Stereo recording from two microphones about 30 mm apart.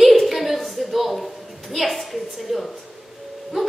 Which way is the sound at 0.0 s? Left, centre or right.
Centre.